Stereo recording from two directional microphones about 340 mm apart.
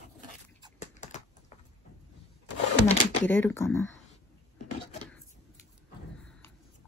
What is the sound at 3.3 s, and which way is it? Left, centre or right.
Speech, centre.